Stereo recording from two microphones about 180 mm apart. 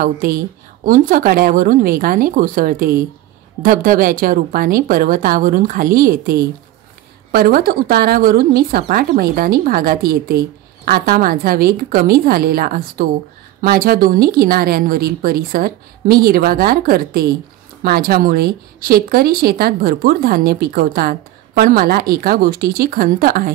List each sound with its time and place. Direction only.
0.0 s a woman's voice: 50° right (ahead or behind)